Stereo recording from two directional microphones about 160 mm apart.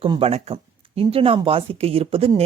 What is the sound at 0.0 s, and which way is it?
Speech, 35° right (ahead or behind).